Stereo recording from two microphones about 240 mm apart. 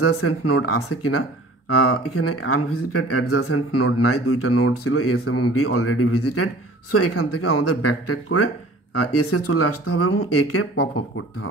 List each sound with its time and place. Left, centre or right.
0.0 s speech: left